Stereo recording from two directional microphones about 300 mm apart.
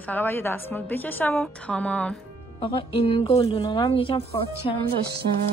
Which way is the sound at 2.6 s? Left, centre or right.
Centre.